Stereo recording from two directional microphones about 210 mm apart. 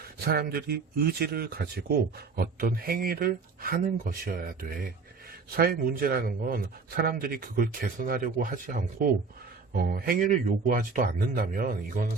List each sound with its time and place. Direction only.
0.0 s speech: 45° right (ahead or behind)